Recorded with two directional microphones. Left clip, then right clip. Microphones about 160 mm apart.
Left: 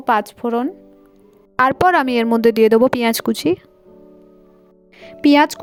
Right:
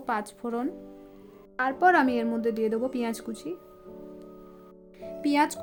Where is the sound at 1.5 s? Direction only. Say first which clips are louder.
Left 8 dB; 90° left.